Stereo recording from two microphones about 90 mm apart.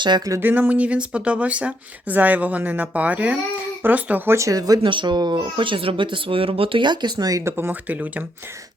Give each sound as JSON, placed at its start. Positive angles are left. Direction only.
{"t": 0.3, "sound": "speech", "side_deg": -25}
{"t": 4.4, "sound": "speech", "side_deg": -40}
{"t": 4.8, "sound": "speech", "side_deg": -65}
{"t": 7.5, "sound": "speech", "side_deg": -20}